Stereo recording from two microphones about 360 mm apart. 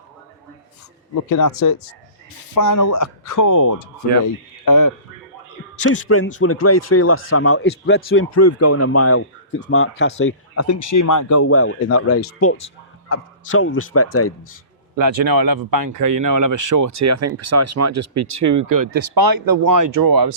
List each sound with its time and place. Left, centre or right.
1.1 s speech: left
5.8 s speech: left
11.4 s speech: left
14.9 s speech: right